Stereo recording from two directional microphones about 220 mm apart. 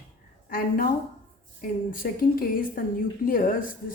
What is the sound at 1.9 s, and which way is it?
Speech, 40° left (ahead or behind).